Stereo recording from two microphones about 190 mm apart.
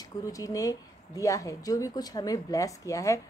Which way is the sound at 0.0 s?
15° left (ahead or behind).